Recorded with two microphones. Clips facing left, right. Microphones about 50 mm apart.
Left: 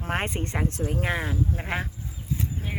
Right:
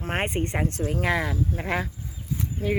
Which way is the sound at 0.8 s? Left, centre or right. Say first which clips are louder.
Right 3 dB; right.